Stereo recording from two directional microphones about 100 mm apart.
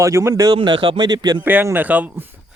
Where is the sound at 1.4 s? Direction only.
20° right (ahead or behind).